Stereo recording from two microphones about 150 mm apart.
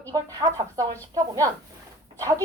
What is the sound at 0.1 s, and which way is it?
Speech, 25° right (ahead or behind).